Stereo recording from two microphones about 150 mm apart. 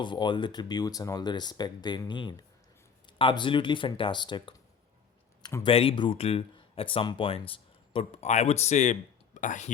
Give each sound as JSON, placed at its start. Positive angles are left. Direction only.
{"t": 0.0, "sound": "speech", "side_deg": 30}
{"t": 5.4, "sound": "a sound", "side_deg": 20}
{"t": 5.6, "sound": "speech", "side_deg": 40}